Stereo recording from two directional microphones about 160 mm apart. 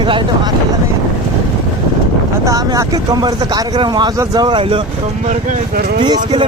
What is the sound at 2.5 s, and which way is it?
Speech, 20° right (ahead or behind).